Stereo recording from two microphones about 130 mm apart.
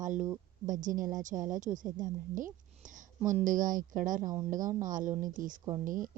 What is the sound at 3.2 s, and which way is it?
A woman's voice, 75° right (ahead or behind).